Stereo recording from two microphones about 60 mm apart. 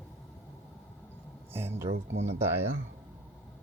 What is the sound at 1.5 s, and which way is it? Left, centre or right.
Speech, right.